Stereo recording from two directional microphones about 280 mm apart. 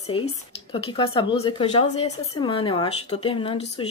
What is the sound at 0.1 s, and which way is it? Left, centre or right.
Speech, centre.